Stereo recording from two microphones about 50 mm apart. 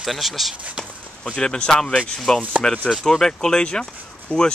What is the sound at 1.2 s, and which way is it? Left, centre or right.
Speech, centre.